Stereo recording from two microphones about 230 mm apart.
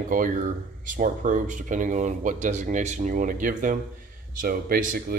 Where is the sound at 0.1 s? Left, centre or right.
Right.